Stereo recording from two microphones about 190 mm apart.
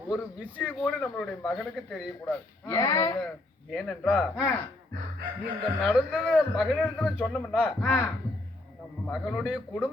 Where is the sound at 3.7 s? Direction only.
5° left (ahead or behind).